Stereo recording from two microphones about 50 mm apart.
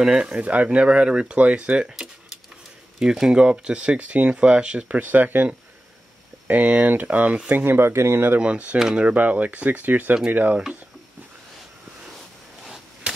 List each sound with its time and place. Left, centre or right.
0.4 s speech: right
8.4 s speech: right
13.0 s a sound: right